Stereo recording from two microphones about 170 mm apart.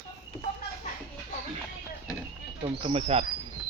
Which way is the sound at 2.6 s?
30° right (ahead or behind).